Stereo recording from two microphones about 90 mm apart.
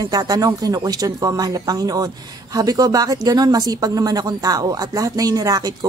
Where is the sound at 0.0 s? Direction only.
45° right (ahead or behind).